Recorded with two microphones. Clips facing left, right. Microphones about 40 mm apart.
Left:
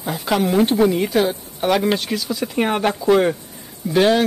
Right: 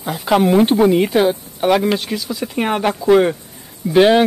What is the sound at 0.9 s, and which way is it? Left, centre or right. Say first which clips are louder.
Speech: right 4 dB; centre.